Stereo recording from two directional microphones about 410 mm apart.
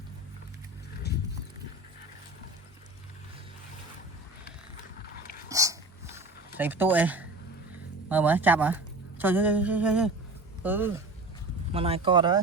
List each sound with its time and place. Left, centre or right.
5.1 s whispering: left
5.5 s a sound: centre
8.1 s speech: centre